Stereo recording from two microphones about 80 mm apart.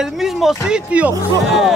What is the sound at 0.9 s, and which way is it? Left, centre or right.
Speech, centre.